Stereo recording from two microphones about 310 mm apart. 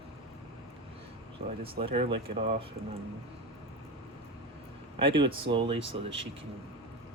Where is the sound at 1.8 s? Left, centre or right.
Centre.